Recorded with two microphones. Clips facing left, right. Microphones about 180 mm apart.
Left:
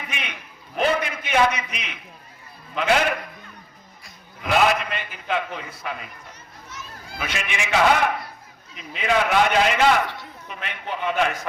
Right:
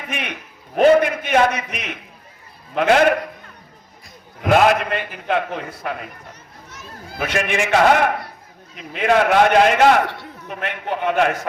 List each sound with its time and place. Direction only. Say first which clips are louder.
0.1 s a man's voice: right 6 dB; 55° right (ahead or behind)
4.4 s a man's voice: right 5 dB; 50° right (ahead or behind)